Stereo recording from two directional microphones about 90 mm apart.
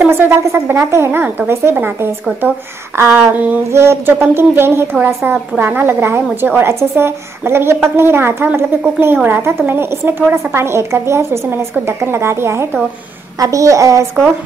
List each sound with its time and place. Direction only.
0.0 s a woman's voice: 25° right (ahead or behind)